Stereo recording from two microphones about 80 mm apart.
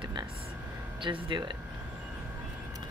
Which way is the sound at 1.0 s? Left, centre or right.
Right.